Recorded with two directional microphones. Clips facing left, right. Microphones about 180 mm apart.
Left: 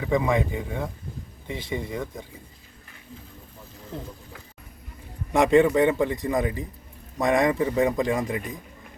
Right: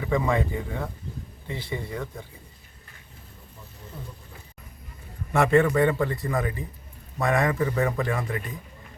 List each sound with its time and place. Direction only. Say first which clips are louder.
0.0 s a man's voice: left 2 dB; 15° left (ahead or behind)
5.3 s a man's voice: left 2 dB; 15° left (ahead or behind)